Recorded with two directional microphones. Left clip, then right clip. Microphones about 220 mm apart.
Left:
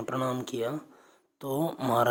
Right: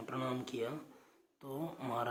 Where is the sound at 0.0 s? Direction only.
40° left (ahead or behind).